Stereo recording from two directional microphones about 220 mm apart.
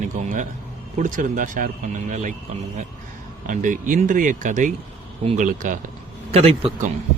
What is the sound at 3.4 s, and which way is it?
A man's voice, 35° right (ahead or behind).